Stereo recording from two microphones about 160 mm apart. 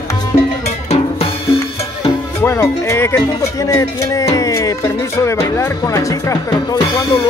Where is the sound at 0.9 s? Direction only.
35° left (ahead or behind).